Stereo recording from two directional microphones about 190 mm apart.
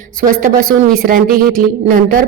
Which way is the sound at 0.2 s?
50° right (ahead or behind).